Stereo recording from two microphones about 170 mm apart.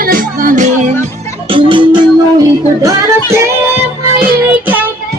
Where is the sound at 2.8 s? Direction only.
15° right (ahead or behind).